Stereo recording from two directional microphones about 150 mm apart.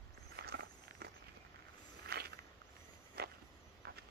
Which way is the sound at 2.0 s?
90° right.